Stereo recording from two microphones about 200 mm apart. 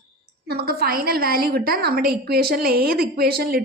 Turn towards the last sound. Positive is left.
turn(degrees=-50)  # may be behind; listen again after turning